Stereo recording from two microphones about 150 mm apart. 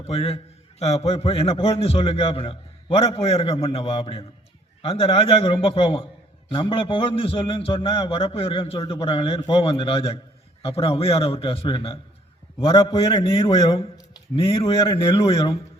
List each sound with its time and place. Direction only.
0.1 s a man's voice: 45° left (ahead or behind)